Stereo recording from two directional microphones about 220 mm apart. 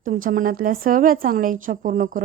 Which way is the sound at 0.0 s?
40° right (ahead or behind).